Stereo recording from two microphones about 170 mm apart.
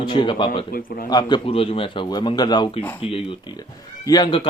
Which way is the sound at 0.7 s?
60° left (ahead or behind).